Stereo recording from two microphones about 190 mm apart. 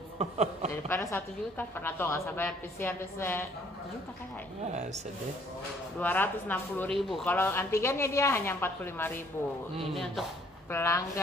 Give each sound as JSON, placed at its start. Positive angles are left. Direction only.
{"t": 0.2, "sound": "chuckle", "side_deg": -35}
{"t": 0.8, "sound": "a woman's voice", "side_deg": 15}
{"t": 5.9, "sound": "a woman's voice", "side_deg": 10}
{"t": 7.0, "sound": "speech", "side_deg": 0}
{"t": 7.2, "sound": "a woman's voice", "side_deg": 10}
{"t": 10.7, "sound": "a woman's voice", "side_deg": 15}